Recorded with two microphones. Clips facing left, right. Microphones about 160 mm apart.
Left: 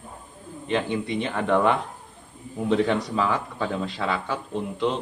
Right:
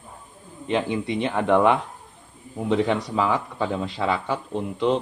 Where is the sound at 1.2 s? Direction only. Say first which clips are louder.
Right 3 dB; 15° right (ahead or behind).